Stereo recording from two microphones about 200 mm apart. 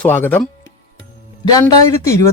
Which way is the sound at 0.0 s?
10° left (ahead or behind).